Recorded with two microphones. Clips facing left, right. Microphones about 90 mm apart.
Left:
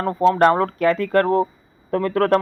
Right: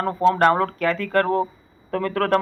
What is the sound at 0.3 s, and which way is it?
Speech, 25° left (ahead or behind).